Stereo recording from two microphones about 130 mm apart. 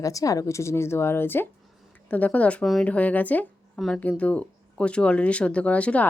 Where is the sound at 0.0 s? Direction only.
25° left (ahead or behind).